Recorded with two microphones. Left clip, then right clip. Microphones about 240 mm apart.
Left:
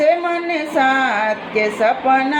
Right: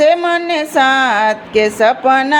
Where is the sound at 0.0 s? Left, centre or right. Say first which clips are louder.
Right 4 dB; right.